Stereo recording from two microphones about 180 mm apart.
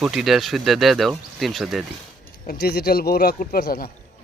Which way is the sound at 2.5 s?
60° left (ahead or behind).